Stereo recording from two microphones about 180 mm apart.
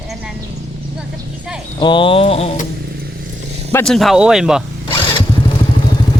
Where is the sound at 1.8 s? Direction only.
25° left (ahead or behind).